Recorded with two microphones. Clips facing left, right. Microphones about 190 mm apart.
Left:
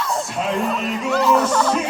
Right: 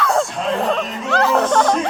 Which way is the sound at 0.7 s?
70° right (ahead or behind).